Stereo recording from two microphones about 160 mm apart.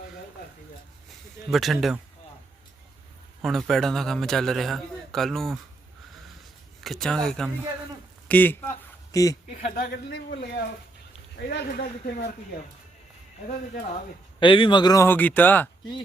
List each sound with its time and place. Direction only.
1.5 s a man's voice: centre (ahead or behind)
3.4 s a man's voice: centre (ahead or behind)
6.8 s a man's voice: centre (ahead or behind)
9.1 s speech: 20° left (ahead or behind)
9.5 s a man's voice: 55° left (ahead or behind)
9.9 s a man's voice: 90° left; by 12.2 s 65° left (ahead or behind)
14.3 s speech: 30° left (ahead or behind); by 15.7 s 10° left (ahead or behind)